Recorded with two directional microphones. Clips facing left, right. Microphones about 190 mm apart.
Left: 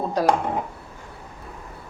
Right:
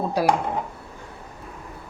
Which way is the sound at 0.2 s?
10° right (ahead or behind).